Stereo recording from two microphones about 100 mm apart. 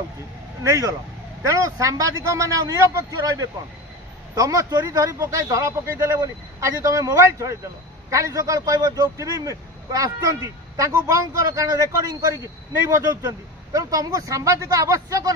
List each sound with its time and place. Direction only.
1.4 s speech: 35° right (ahead or behind)